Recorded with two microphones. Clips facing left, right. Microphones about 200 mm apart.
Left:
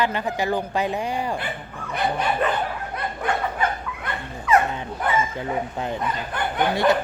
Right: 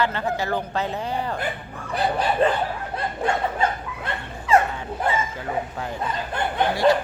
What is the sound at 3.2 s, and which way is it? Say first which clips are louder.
Dog: right 1 dB; 25° right (ahead or behind).